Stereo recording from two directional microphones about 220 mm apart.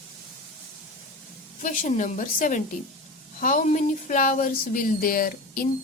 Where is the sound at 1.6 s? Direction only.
35° left (ahead or behind).